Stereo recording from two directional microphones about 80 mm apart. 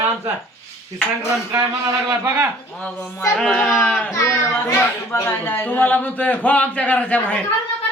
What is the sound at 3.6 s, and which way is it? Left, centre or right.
Speech, centre.